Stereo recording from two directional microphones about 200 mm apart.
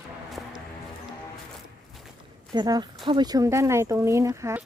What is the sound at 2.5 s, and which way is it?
Speech, 20° right (ahead or behind).